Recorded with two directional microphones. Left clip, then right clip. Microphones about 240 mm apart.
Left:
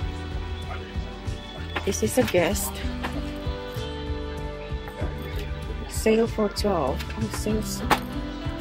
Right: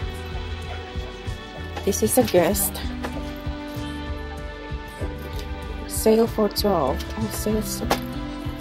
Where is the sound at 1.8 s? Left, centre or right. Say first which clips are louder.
Right 4 dB; right.